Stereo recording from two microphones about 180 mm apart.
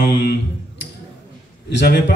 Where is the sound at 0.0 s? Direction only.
65° left (ahead or behind).